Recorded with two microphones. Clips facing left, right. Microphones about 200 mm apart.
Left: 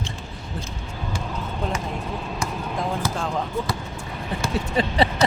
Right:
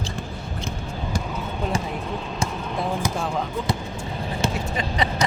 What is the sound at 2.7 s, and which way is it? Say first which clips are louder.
Basketball bounce: right 1 dB; 10° right (ahead or behind).